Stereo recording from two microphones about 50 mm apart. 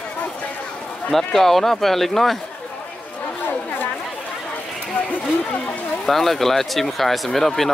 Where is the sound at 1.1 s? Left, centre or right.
Centre.